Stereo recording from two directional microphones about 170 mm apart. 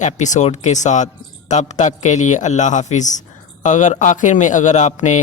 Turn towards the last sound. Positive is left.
turn(degrees=45)  # may be behind; listen again after turning